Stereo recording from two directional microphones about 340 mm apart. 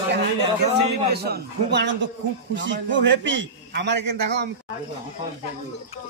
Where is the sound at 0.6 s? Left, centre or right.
Right.